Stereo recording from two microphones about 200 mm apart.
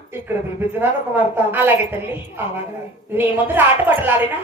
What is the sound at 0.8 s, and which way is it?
Speech, 10° right (ahead or behind).